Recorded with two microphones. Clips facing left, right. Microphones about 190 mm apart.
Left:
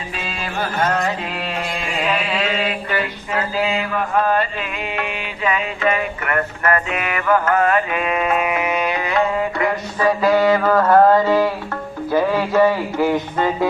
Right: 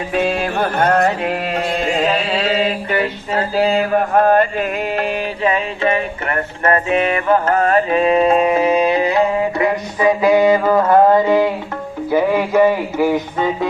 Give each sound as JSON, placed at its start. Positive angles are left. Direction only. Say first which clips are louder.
{"t": 0.1, "sound": "music", "louder": "right 12 dB", "side_deg": -60}
{"t": 2.0, "sound": "mantra", "louder": "right 4 dB", "side_deg": -35}
{"t": 4.9, "sound": "music", "louder": "right 6 dB", "side_deg": -35}
{"t": 12.1, "sound": "speech", "louder": "right 2 dB", "side_deg": -15}